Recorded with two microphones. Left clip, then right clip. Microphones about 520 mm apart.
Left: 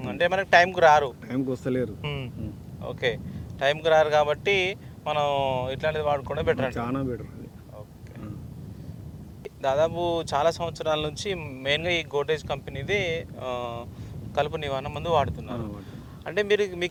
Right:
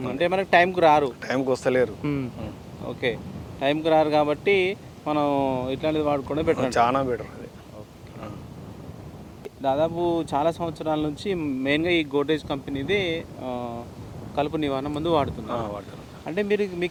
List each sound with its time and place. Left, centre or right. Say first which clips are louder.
0.1 s speech: even; left
1.6 s speech: right 8 dB; right
2.0 s speech: right 5 dB; left
6.8 s speech: right 8 dB; right
9.6 s a man's voice: even; left
14.3 s speech: right 2 dB; left
16.2 s a man's voice: left 1 dB; left